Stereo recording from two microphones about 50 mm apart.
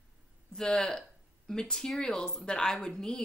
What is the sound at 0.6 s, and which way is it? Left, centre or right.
Speech, centre.